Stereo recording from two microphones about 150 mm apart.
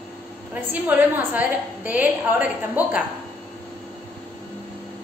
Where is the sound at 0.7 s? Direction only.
10° right (ahead or behind).